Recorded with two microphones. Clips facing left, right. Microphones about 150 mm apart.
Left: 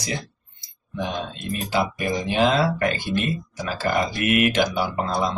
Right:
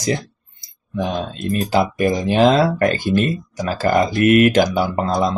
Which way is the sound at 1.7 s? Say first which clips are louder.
Right 6 dB; 45° right (ahead or behind).